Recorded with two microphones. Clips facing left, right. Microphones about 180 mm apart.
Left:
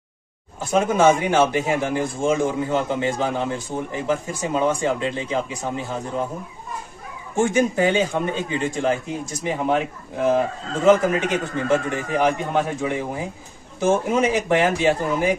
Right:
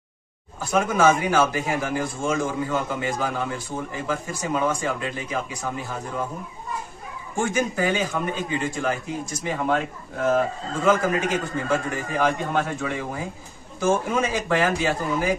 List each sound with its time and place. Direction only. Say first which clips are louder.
0.6 s a man's voice: left 3 dB; 25° left (ahead or behind)
7.3 s a man's voice: left 5 dB; 25° left (ahead or behind)